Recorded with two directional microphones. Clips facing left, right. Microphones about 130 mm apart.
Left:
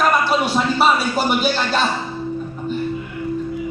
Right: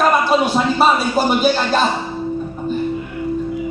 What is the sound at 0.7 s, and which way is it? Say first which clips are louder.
Speech: right 2 dB; 40° right (ahead or behind).